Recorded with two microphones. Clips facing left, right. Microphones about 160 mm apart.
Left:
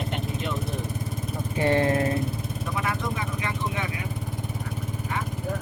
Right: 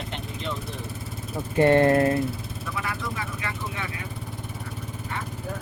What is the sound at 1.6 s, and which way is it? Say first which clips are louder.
Speech: right 5 dB; 55° right (ahead or behind).